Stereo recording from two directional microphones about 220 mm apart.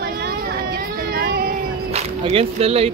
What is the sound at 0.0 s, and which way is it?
Vehicle, 45° right (ahead or behind).